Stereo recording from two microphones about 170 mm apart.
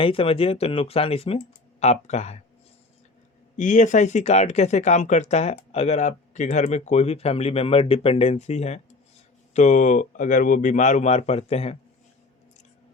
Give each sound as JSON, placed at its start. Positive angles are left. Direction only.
{"t": 0.0, "sound": "speech", "side_deg": 35}
{"t": 3.6, "sound": "speech", "side_deg": 45}